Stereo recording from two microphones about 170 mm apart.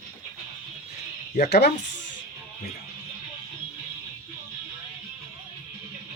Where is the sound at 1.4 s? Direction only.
75° left (ahead or behind).